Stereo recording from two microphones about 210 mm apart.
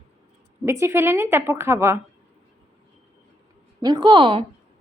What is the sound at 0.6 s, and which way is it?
A woman's voice, 15° right (ahead or behind).